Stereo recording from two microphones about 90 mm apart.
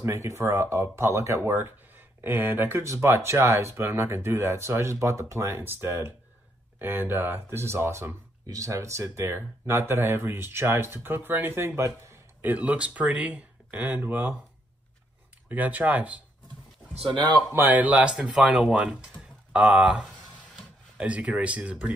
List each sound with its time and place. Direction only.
0.0 s speech: 35° right (ahead or behind)
12.0 s a sound: 30° right (ahead or behind)
12.4 s speech: 15° right (ahead or behind)
15.4 s speech: 20° right (ahead or behind)
17.1 s speech: 60° right (ahead or behind)
17.6 s speech: 20° right (ahead or behind)